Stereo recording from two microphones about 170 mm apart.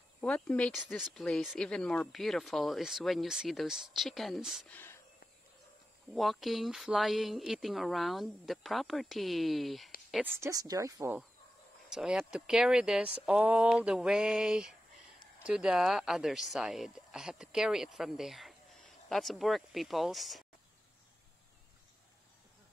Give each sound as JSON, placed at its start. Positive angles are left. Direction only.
{"t": 0.2, "sound": "speech", "side_deg": 5}
{"t": 4.6, "sound": "a sound", "side_deg": 10}
{"t": 6.1, "sound": "speech", "side_deg": 0}
{"t": 10.2, "sound": "speech", "side_deg": -15}
{"t": 11.9, "sound": "speech", "side_deg": -5}